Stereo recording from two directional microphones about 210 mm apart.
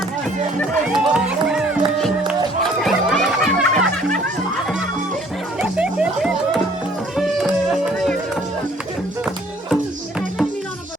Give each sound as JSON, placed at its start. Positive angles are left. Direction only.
{"t": 0.9, "sound": "music", "side_deg": -5}
{"t": 5.5, "sound": "music", "side_deg": -5}